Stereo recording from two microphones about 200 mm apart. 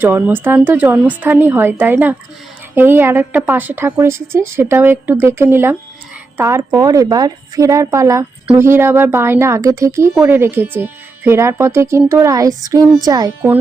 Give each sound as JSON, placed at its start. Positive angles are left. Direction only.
{"t": 0.0, "sound": "speech", "side_deg": -10}